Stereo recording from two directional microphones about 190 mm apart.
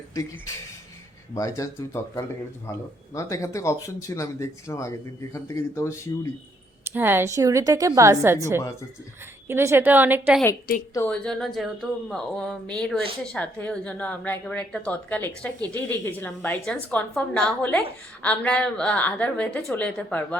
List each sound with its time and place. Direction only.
0.1 s a woman's voice: 15° left (ahead or behind)
6.9 s a woman's voice: 10° right (ahead or behind)
10.9 s a woman's voice: 10° left (ahead or behind)